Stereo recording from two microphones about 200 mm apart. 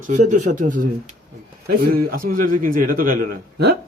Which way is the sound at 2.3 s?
45° right (ahead or behind).